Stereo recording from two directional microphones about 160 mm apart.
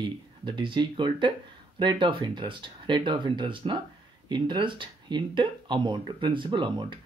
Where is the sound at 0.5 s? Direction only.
30° right (ahead or behind).